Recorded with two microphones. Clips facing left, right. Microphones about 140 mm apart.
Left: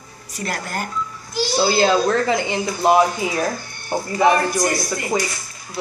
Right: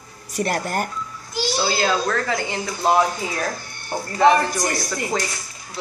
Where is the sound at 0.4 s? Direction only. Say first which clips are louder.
Right 4 dB; 55° right (ahead or behind).